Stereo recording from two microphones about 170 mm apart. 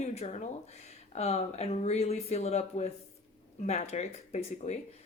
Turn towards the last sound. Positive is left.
turn(degrees=40)  # may be behind; listen again after turning